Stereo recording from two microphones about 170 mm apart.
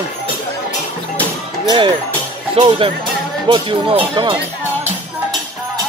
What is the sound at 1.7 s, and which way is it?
Speech, 25° right (ahead or behind).